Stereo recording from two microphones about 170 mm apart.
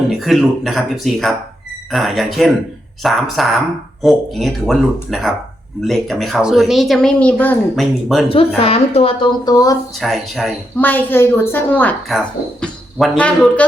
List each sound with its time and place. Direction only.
0.1 s speech: centre (ahead or behind)
8.3 s a woman's voice: 35° left (ahead or behind)
10.0 s a woman's voice: centre (ahead or behind)